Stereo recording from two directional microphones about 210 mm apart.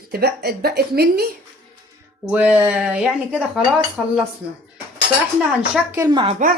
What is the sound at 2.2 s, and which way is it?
Speech, 5° right (ahead or behind).